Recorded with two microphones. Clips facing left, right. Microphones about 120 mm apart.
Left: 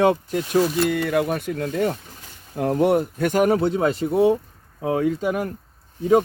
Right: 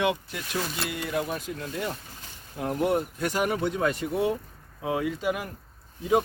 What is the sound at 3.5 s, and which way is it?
Speech, 30° left (ahead or behind).